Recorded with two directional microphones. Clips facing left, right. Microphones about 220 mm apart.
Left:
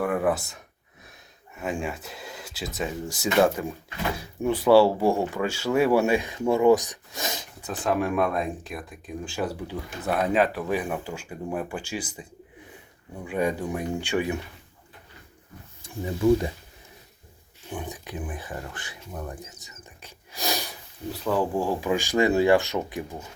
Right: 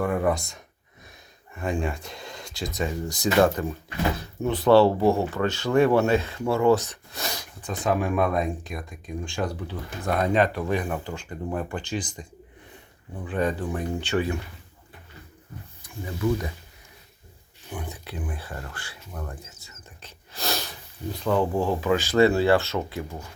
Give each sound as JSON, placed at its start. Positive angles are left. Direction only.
{"t": 0.0, "sound": "speech", "side_deg": 5}
{"t": 7.6, "sound": "speech", "side_deg": 0}
{"t": 17.7, "sound": "speech", "side_deg": 20}